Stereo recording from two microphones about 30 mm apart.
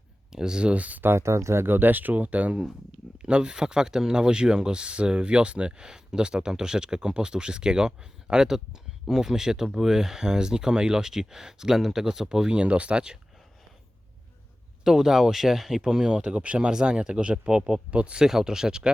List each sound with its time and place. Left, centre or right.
0.3 s speech: right
0.6 s speech: right
1.8 s speech: right
3.2 s speech: right
12.5 s speech: right
14.8 s speech: centre; by 16.6 s right
16.6 s speech: right
17.9 s speech: right
18.3 s speech: centre